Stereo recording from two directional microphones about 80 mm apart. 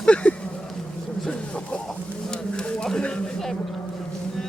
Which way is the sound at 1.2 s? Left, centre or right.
Centre.